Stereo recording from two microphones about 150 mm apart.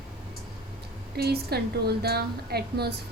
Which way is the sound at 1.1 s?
90° right.